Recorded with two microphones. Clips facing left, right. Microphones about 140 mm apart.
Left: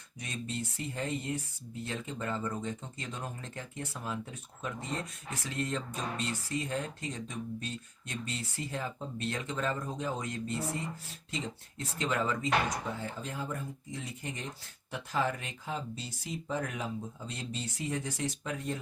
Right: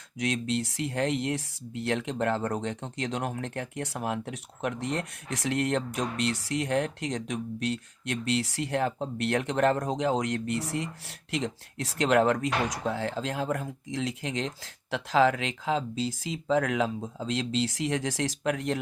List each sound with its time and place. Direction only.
0.2 s speech: 90° right